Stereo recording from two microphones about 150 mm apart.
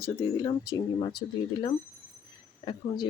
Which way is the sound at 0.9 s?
35° left (ahead or behind).